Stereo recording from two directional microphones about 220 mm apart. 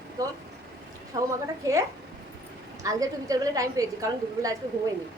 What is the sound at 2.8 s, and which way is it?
A woman's voice, 15° right (ahead or behind).